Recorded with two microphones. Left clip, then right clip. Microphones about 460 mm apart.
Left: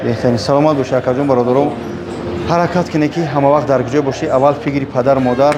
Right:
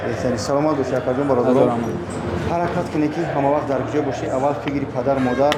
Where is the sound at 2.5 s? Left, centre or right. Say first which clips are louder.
Left 8 dB; left.